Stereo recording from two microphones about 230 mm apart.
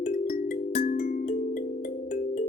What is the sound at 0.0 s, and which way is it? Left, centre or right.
Music, left.